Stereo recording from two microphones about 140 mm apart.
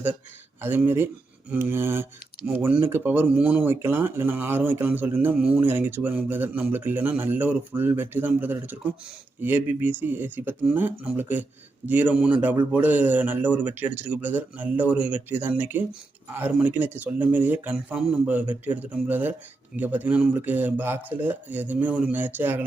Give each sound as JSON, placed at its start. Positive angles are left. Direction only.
{"t": 0.6, "sound": "speech", "side_deg": -15}